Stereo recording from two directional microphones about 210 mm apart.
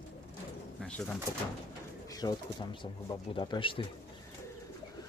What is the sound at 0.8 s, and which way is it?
Bird, 5° left (ahead or behind).